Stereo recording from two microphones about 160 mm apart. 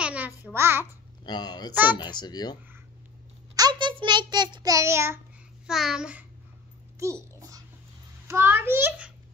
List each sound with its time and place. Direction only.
0.0 s babbling: 10° right (ahead or behind)
0.4 s a child's voice: 15° right (ahead or behind)
1.2 s a child's voice: 25° left (ahead or behind)
1.7 s a child's voice: 10° right (ahead or behind)
2.0 s a child's voice: 25° left (ahead or behind)
3.5 s a child's voice: 25° right (ahead or behind)
5.7 s a child's voice: centre (ahead or behind)
7.0 s babbling: 20° right (ahead or behind)
8.3 s a child's voice: 15° right (ahead or behind)